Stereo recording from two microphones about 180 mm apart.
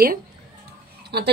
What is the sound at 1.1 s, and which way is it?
Speech, 65° right (ahead or behind).